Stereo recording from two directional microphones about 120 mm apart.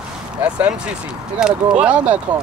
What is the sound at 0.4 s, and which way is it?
Speech, 10° right (ahead or behind).